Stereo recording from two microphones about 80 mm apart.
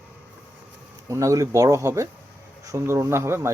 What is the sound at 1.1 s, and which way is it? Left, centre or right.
Speech, right.